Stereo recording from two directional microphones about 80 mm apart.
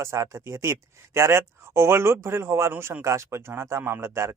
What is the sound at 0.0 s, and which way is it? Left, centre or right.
Speech, right.